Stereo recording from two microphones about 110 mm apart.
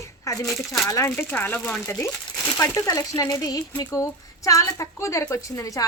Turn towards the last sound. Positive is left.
turn(degrees=30)  # may be behind; listen again after turning